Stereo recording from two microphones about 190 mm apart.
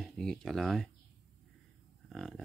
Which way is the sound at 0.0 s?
Centre (ahead or behind).